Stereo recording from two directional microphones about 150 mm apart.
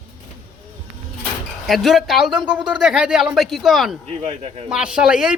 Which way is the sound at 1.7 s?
Centre (ahead or behind).